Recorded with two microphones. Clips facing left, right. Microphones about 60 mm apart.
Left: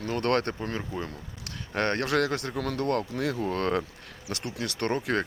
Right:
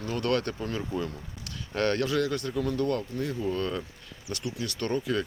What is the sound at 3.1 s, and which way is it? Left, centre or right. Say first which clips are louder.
Speech: left 2 dB; left.